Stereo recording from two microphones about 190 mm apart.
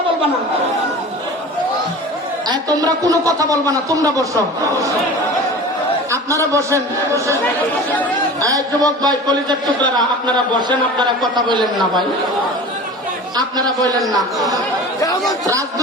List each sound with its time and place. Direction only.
2.5 s speech: 20° right (ahead or behind)
6.1 s speech: 15° right (ahead or behind)
8.4 s a man's voice: 20° right (ahead or behind)
13.3 s a man's voice: 20° right (ahead or behind)
14.0 s a man's voice: centre (ahead or behind)